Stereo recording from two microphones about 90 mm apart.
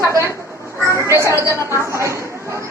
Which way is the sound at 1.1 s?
30° right (ahead or behind).